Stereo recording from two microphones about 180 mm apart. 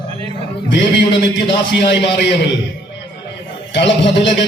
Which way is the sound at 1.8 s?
70° left (ahead or behind).